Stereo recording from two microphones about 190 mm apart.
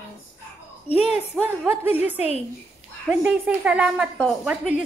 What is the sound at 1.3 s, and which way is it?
A woman's voice, 5° right (ahead or behind).